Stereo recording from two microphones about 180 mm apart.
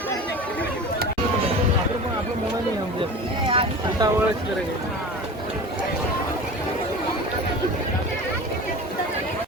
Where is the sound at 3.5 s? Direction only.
30° right (ahead or behind).